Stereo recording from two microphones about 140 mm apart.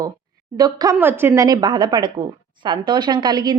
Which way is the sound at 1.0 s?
15° right (ahead or behind).